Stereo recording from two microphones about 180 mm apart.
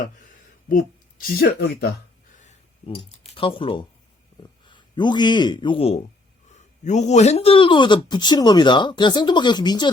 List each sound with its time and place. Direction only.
1.4 s speech: 60° left (ahead or behind)
2.3 s a sound: 40° left (ahead or behind)
3.2 s speech: 30° left (ahead or behind)